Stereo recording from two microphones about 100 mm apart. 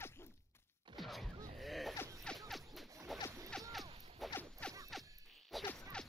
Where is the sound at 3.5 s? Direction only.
Centre (ahead or behind).